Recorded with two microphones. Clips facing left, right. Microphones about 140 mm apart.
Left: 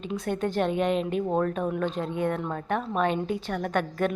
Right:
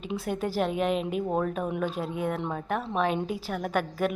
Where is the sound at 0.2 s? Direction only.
5° right (ahead or behind).